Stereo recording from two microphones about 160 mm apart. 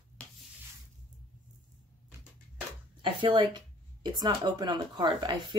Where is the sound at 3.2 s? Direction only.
30° right (ahead or behind).